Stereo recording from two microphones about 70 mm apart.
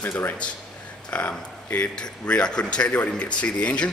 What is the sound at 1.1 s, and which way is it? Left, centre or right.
A man's voice, centre.